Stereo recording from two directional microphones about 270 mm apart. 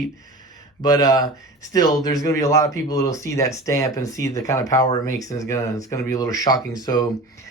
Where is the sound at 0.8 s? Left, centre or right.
Centre.